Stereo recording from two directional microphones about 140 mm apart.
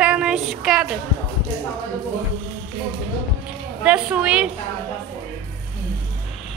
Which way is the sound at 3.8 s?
10° right (ahead or behind).